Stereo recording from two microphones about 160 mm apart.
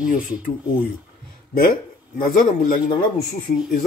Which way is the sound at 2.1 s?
65° left (ahead or behind).